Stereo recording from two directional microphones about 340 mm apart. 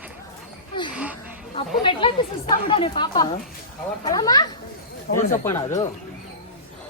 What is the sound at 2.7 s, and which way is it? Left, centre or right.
A woman's voice, centre.